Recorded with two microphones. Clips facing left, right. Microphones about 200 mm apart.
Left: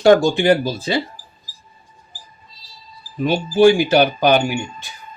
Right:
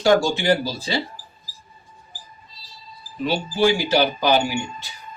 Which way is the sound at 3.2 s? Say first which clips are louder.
Left 7 dB; 50° left (ahead or behind).